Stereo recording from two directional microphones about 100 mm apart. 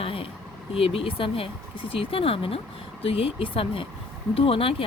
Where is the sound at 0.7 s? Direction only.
75° left (ahead or behind).